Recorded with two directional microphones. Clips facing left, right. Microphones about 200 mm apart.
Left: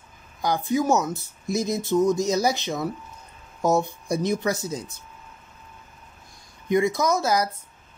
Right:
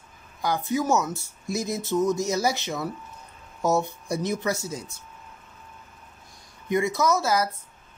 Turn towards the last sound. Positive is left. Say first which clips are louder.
# left 1 dB
turn(degrees=15)  # may be behind; listen again after turning